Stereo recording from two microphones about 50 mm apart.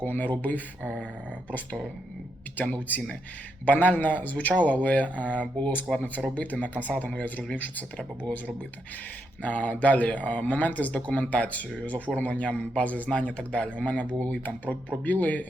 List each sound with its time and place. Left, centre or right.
0.0 s speech: left
2.6 s a man's voice: left